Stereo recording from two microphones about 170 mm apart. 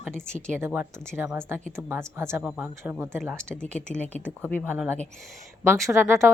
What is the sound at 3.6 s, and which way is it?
Speech, 5° left (ahead or behind).